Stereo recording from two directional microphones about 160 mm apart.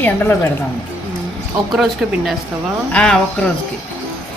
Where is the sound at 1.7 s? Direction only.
Centre (ahead or behind).